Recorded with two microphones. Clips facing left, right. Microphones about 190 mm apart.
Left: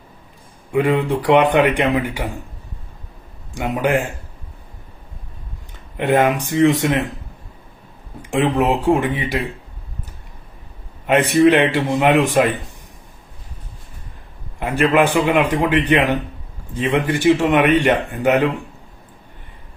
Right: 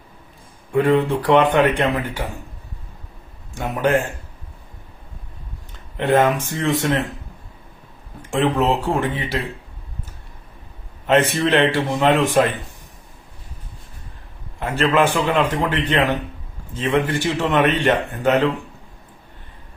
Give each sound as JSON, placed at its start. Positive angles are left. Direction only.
{"t": 0.7, "sound": "a man's voice", "side_deg": 15}
{"t": 3.5, "sound": "a man's voice", "side_deg": 15}
{"t": 6.0, "sound": "a man's voice", "side_deg": 15}
{"t": 8.2, "sound": "a man's voice", "side_deg": 15}
{"t": 11.0, "sound": "a man's voice", "side_deg": 15}
{"t": 14.6, "sound": "a man's voice", "side_deg": 15}